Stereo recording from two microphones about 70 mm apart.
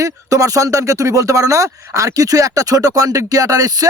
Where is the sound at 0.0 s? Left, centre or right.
Right.